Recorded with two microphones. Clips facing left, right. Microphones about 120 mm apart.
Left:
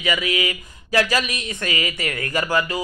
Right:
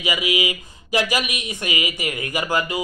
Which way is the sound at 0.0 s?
15° right (ahead or behind).